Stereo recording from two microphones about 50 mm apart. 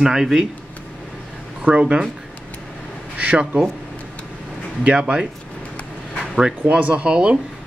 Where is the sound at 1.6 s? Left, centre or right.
Right.